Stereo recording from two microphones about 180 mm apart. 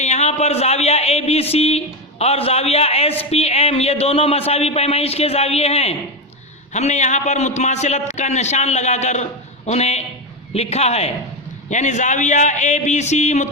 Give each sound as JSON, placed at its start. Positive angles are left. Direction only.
{"t": 0.0, "sound": "speech", "side_deg": 40}